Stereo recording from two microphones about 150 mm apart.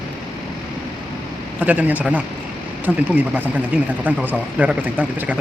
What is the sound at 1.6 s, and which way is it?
Speech, 10° right (ahead or behind).